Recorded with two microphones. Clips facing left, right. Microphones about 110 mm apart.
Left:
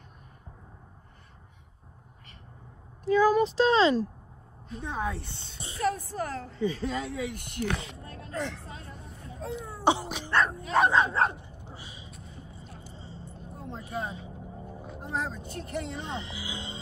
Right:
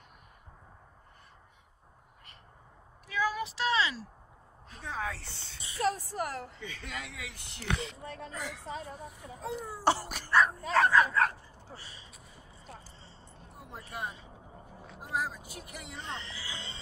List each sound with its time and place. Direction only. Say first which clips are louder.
3.1 s speech: left 11 dB; 40° left (ahead or behind)
4.8 s speech: left 4 dB; 20° left (ahead or behind)
5.6 s a sound: left 1 dB; 25° left (ahead or behind)
6.1 s a woman's voice: left 2 dB; 20° right (ahead or behind)
6.6 s speech: left 12 dB; 35° left (ahead or behind)
7.6 s speech: left 3 dB; centre (ahead or behind)
10.7 s speech: left 3 dB; 20° left (ahead or behind)
12.1 s a sound: left 7 dB; 5° right (ahead or behind)
13.7 s speech: left 6 dB; 20° left (ahead or behind)
14.7 s music: left 6 dB; centre (ahead or behind)
15.1 s speech: left 1 dB; 5° right (ahead or behind)
16.3 s speech: left 5 dB; 15° left (ahead or behind)